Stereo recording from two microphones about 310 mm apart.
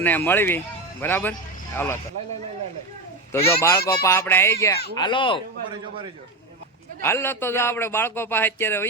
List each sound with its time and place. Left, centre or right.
0.0 s a man's voice: centre
3.3 s a man's voice: centre
7.0 s a man's voice: centre